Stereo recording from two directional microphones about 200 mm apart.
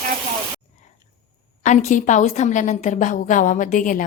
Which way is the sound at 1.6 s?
40° left (ahead or behind).